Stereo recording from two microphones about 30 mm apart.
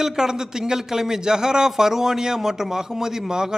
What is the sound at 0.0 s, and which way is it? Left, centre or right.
A man's voice, centre.